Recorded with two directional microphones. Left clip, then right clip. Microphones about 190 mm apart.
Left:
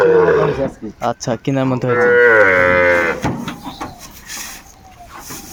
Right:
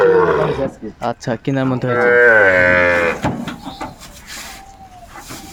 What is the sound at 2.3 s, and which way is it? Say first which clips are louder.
Cattle: even; 40° right (ahead or behind).